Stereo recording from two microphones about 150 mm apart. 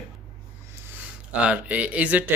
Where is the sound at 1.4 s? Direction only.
10° right (ahead or behind).